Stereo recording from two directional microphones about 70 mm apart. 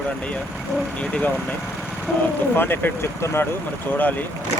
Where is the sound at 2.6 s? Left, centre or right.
Left.